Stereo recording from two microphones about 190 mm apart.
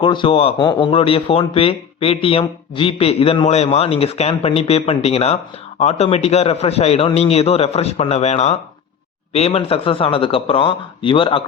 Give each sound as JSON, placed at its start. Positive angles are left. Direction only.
{"t": 0.0, "sound": "speech", "side_deg": 25}